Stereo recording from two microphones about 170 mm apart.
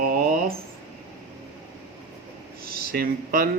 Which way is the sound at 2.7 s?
60° right (ahead or behind).